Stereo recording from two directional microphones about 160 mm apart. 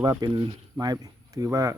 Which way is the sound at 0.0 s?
25° right (ahead or behind).